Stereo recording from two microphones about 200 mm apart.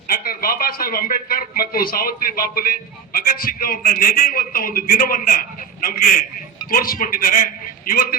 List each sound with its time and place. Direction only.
0.1 s speech: 45° left (ahead or behind)